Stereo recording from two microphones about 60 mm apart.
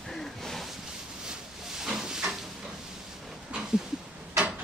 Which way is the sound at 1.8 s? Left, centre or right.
Centre.